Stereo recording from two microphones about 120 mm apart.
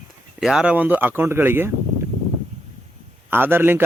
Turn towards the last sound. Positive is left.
turn(degrees=-20)  # may be behind; listen again after turning